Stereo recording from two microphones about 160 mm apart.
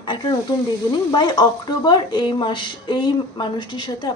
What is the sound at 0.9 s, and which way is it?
Speech, 25° left (ahead or behind).